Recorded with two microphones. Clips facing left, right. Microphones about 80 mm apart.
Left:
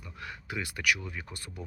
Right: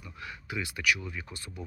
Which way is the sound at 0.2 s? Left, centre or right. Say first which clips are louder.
Even; left.